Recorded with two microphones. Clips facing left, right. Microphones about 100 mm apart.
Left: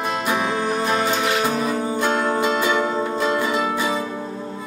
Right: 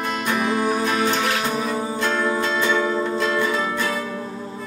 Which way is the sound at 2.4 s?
10° left (ahead or behind).